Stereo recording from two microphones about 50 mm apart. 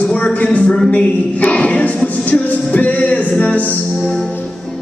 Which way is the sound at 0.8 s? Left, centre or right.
Left.